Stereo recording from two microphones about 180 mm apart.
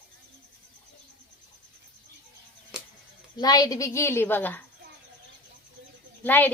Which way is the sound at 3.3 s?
20° left (ahead or behind).